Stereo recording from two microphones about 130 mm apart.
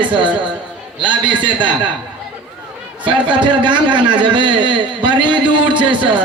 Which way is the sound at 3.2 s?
40° right (ahead or behind).